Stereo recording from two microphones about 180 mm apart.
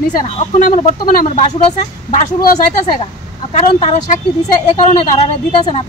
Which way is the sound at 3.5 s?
40° left (ahead or behind).